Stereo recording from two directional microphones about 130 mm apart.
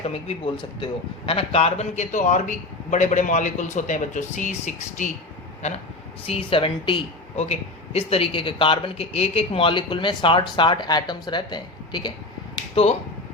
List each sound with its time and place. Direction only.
0.0 s speech: 50° left (ahead or behind)
0.5 s a man's voice: 40° left (ahead or behind); by 5.1 s 70° left (ahead or behind)
5.6 s speech: 60° left (ahead or behind)
6.2 s speech: 45° left (ahead or behind)
7.3 s speech: 55° left (ahead or behind); by 12.1 s 35° left (ahead or behind)
12.5 s finger snapping: 45° left (ahead or behind)